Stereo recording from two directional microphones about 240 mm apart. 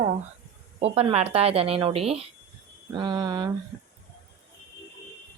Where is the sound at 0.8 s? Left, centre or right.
Right.